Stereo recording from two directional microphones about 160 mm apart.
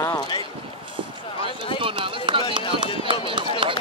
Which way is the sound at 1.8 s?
35° right (ahead or behind).